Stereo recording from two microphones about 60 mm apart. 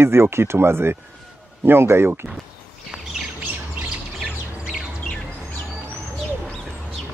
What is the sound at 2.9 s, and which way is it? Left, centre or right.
Bird, centre.